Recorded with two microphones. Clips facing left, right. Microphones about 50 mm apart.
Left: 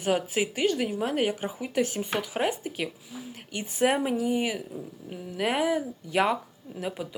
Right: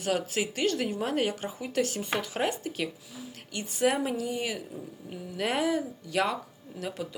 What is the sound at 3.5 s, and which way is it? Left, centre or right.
Speech, left.